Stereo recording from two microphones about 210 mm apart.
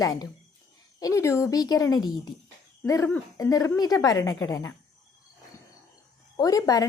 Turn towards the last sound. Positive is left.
turn(degrees=15)  # may be behind; listen again after turning